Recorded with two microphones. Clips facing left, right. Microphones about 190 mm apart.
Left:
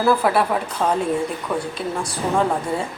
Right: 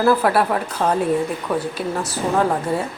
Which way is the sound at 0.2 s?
Centre (ahead or behind).